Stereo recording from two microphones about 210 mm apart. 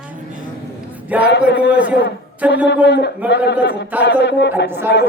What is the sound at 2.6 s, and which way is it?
A man's voice, 55° left (ahead or behind).